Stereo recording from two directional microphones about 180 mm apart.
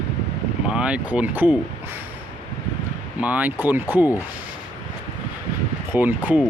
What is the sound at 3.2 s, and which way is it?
Speech, 10° right (ahead or behind).